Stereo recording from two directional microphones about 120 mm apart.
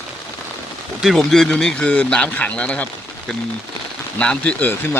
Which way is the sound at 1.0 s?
Centre (ahead or behind).